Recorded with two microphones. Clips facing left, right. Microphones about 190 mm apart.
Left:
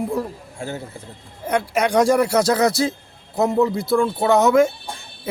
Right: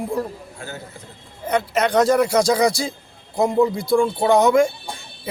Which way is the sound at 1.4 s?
10° left (ahead or behind).